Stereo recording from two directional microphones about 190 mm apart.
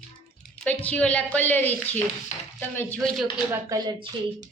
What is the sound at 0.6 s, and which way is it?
A woman's voice, 5° left (ahead or behind).